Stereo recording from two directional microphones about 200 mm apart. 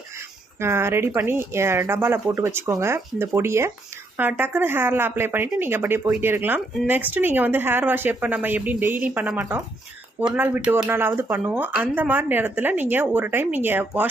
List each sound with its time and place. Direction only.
0.6 s speech: 15° right (ahead or behind)